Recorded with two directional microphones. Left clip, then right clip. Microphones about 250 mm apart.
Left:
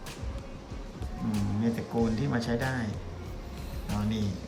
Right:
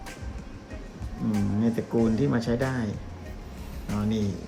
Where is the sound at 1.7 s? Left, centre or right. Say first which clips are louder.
Right 5 dB; centre.